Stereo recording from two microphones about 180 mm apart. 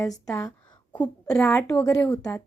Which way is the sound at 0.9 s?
10° left (ahead or behind).